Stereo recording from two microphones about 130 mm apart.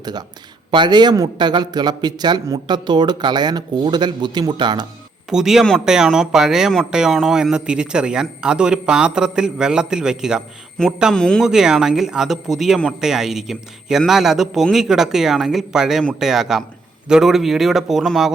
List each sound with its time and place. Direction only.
0.0 s a man's voice: 30° right (ahead or behind)
5.3 s speech: 5° right (ahead or behind)